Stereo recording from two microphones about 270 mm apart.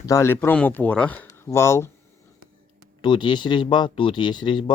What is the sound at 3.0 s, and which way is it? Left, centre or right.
Speech, centre.